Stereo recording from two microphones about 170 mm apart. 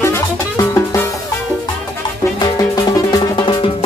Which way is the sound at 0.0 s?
15° left (ahead or behind).